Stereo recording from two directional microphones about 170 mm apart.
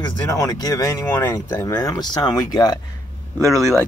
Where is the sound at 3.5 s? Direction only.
Centre (ahead or behind).